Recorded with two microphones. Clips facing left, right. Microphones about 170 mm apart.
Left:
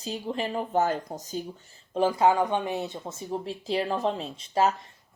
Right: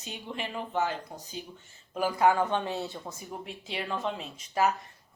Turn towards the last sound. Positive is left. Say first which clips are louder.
# left 3 dB
turn(degrees=25)  # may be behind; listen again after turning